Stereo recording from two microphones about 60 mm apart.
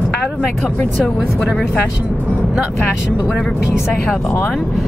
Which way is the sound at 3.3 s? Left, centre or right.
Centre.